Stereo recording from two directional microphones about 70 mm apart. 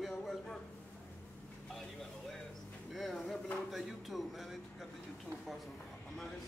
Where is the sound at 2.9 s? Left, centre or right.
Centre.